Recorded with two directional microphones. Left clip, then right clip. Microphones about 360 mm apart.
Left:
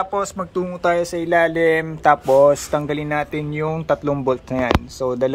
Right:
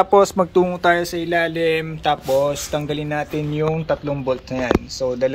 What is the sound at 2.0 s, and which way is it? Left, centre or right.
A man's voice, left.